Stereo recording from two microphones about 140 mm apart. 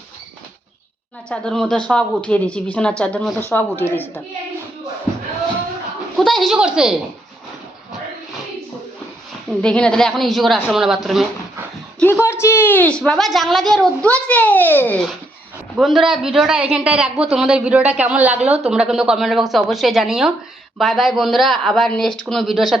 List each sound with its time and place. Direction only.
1.3 s speech: 5° left (ahead or behind)
6.1 s speech: centre (ahead or behind)
9.6 s speech: 5° left (ahead or behind)
11.9 s speech: 10° left (ahead or behind)
15.8 s speech: centre (ahead or behind)
18.4 s a woman's voice: 50° right (ahead or behind)
18.7 s speech: 5° right (ahead or behind)